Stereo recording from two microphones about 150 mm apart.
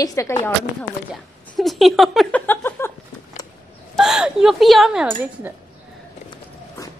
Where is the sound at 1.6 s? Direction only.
Centre (ahead or behind).